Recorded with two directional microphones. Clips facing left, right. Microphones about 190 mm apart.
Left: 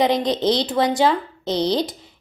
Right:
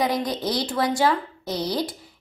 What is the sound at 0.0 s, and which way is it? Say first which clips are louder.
A woman's voice: left 6 dB; 20° left (ahead or behind).